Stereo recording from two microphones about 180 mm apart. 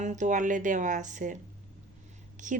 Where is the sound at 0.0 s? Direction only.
40° right (ahead or behind).